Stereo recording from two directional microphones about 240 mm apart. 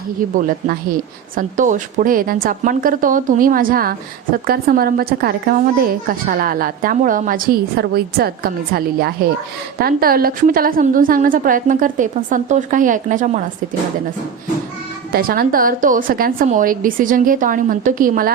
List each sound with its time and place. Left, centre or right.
0.2 s speech: right
1.4 s speech: right
15.1 s speech: right